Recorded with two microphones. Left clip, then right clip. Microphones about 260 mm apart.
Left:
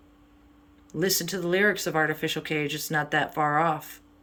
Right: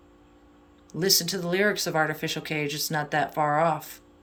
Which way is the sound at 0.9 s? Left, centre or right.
Centre.